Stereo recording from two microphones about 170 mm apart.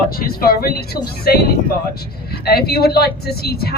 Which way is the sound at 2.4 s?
65° left (ahead or behind).